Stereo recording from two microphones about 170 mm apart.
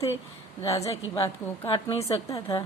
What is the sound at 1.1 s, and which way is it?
A woman's voice, 30° left (ahead or behind).